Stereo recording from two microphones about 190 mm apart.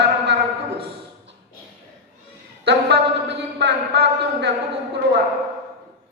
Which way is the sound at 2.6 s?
60° right (ahead or behind).